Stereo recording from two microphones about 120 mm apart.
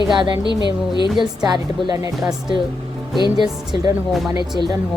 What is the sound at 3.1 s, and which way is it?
Speech, 40° left (ahead or behind).